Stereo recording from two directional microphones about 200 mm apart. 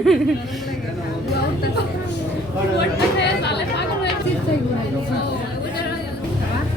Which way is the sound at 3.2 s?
60° left (ahead or behind).